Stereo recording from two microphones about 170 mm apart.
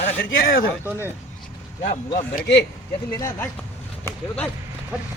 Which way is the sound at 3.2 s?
15° left (ahead or behind).